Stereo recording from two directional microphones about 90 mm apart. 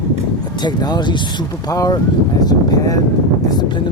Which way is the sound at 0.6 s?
55° left (ahead or behind).